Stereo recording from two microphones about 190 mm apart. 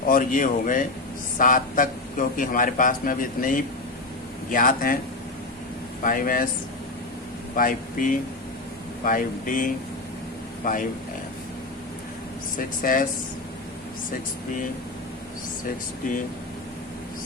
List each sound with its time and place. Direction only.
0.1 s a man's voice: 45° left (ahead or behind)
6.0 s a man's voice: 45° left (ahead or behind)
7.5 s a man's voice: 45° left (ahead or behind)
12.5 s a man's voice: 45° left (ahead or behind)